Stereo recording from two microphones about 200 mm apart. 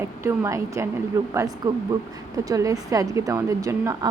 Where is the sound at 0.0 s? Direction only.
15° right (ahead or behind).